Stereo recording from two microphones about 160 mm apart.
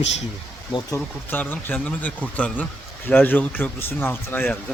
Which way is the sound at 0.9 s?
10° left (ahead or behind).